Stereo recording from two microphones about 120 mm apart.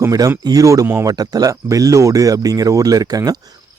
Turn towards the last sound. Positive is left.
turn(degrees=-30)  # may be behind; listen again after turning